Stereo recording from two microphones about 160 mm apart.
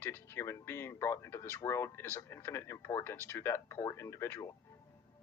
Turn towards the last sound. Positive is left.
turn(degrees=15)  # may be behind; listen again after turning